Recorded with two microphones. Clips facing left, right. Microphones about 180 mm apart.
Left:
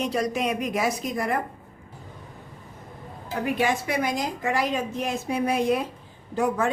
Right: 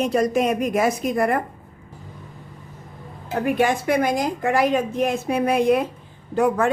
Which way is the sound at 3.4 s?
50° right (ahead or behind).